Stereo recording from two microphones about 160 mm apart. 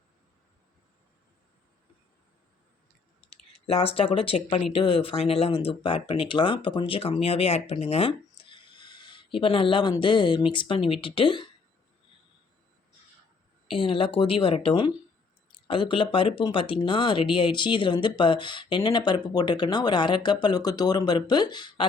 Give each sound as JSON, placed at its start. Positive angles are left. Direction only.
{"t": 3.5, "sound": "speech", "side_deg": 35}
{"t": 13.7, "sound": "speech", "side_deg": 35}